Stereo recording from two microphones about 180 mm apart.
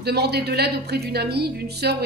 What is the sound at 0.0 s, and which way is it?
A woman's voice, 65° right (ahead or behind).